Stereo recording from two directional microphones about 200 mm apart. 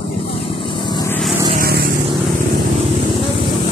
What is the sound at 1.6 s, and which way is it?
Vehicle, 50° right (ahead or behind).